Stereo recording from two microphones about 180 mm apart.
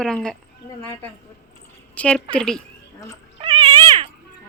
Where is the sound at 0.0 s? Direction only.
5° left (ahead or behind).